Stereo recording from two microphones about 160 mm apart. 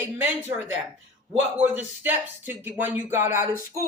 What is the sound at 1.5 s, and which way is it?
Speech, 10° right (ahead or behind).